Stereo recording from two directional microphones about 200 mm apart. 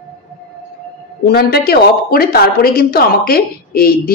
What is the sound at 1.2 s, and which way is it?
A woman's voice, 50° left (ahead or behind).